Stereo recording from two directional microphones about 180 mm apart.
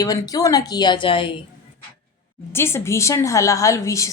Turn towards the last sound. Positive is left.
turn(degrees=15)  # may be behind; listen again after turning